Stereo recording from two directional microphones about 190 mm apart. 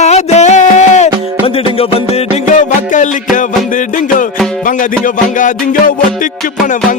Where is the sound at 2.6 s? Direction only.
40° left (ahead or behind).